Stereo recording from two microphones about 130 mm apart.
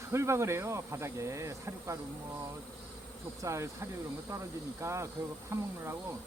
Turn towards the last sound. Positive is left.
turn(degrees=-20)  # may be behind; listen again after turning